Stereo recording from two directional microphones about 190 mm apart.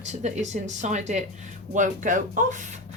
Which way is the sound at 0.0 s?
40° right (ahead or behind).